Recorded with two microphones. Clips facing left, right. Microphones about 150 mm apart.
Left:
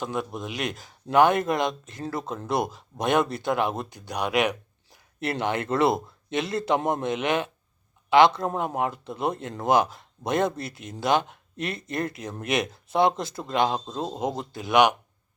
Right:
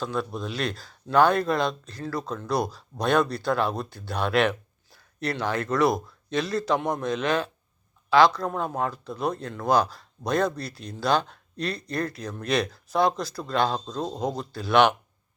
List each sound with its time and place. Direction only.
0.0 s speech: 15° left (ahead or behind)